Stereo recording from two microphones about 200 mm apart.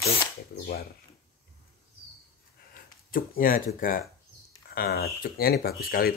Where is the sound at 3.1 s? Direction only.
45° left (ahead or behind).